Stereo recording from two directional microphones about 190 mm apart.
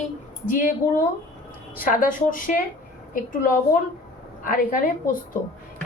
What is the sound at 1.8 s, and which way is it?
A woman's voice, 45° left (ahead or behind).